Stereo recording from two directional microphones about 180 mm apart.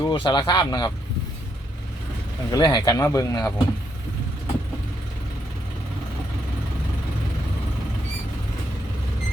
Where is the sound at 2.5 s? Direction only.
25° left (ahead or behind).